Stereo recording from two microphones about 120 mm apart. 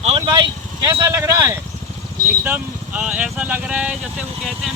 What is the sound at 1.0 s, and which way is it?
Speech, 25° right (ahead or behind).